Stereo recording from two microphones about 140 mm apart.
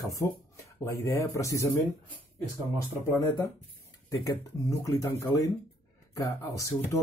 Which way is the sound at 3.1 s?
20° left (ahead or behind).